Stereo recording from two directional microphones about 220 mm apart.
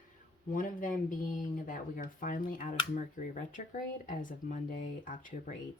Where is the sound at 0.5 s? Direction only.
35° left (ahead or behind).